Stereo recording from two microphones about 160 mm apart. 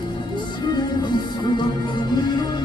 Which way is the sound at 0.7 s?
30° left (ahead or behind).